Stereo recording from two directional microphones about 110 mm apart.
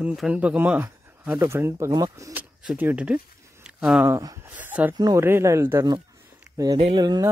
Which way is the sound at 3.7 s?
10° right (ahead or behind).